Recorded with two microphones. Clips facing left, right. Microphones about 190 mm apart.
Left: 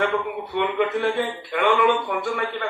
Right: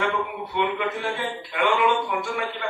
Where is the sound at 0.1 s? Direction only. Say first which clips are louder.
Left 3 dB; 55° left (ahead or behind).